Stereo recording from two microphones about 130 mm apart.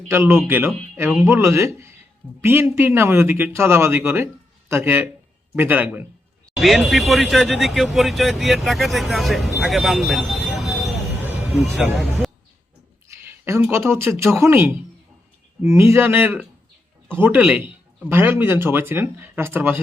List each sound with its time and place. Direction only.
0.1 s a man's voice: 20° right (ahead or behind)
6.6 s speech: centre (ahead or behind)
11.2 s a sound: 15° right (ahead or behind)
11.5 s speech: centre (ahead or behind)
13.1 s speech: 20° right (ahead or behind)